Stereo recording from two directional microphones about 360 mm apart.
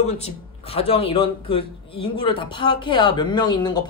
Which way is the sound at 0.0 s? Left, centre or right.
Centre.